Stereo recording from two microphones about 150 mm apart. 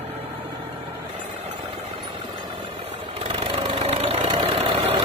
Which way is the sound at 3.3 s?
40° right (ahead or behind).